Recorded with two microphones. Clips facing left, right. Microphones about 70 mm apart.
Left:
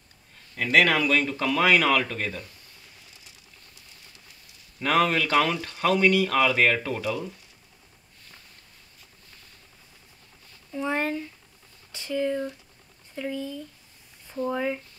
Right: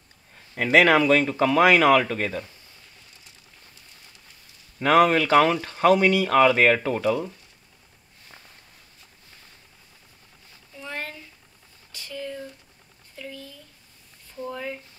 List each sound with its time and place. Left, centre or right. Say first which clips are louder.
0.6 s speech: right 4 dB; right
4.7 s speech: right 5 dB; right
10.8 s a sound: left 8 dB; left
13.1 s speech: left 8 dB; left